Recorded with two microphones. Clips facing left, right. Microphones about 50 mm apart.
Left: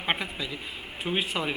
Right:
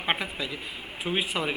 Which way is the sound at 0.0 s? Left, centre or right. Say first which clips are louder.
Right 1 dB; centre.